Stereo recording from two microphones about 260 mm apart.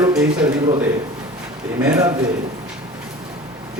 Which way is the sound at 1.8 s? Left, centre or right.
Centre.